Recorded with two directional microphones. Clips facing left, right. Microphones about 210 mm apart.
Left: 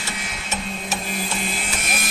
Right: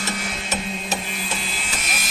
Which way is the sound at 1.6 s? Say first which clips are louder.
Left 3 dB; 55° left (ahead or behind).